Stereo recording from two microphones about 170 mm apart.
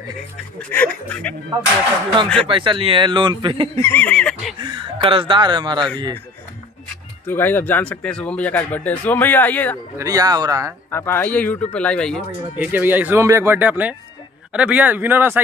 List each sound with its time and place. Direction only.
0.6 s speech: 10° left (ahead or behind)
2.4 s speech: 30° right (ahead or behind)
3.7 s speech: 15° left (ahead or behind)
4.6 s speech: 30° right (ahead or behind)
7.2 s speech: 10° left (ahead or behind)
9.9 s speech: 20° right (ahead or behind)
10.9 s speech: 15° left (ahead or behind)
12.5 s speech: 10° right (ahead or behind)